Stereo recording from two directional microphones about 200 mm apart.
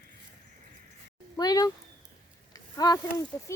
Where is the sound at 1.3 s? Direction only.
20° left (ahead or behind).